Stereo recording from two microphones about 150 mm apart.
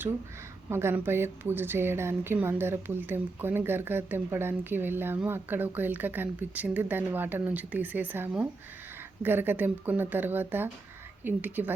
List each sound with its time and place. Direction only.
0.7 s a woman's voice: 15° right (ahead or behind)